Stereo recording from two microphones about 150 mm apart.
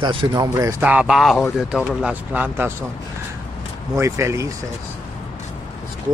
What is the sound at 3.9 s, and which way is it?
Speech, 20° right (ahead or behind).